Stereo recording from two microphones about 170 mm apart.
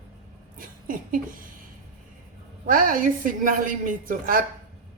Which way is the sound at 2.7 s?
55° right (ahead or behind).